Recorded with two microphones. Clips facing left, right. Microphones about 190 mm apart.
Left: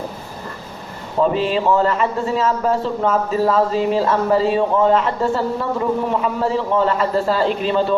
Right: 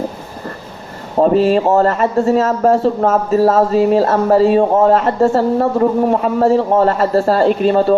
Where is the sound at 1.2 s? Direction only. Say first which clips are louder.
Right 6 dB; 45° right (ahead or behind).